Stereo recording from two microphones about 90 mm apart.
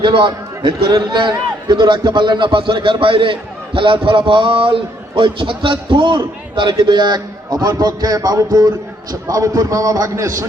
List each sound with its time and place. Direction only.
0.0 s a man's voice: 70° right (ahead or behind); by 10.4 s 40° right (ahead or behind)